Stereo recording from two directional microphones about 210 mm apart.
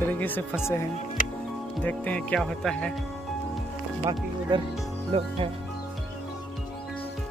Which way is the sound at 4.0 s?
20° right (ahead or behind).